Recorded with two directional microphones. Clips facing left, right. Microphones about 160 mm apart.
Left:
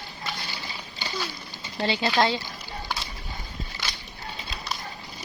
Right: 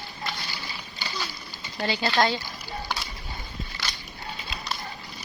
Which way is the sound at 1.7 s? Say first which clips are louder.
Left 2 dB; 25° left (ahead or behind).